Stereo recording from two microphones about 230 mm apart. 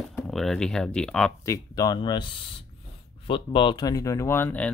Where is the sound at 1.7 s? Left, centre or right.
Centre.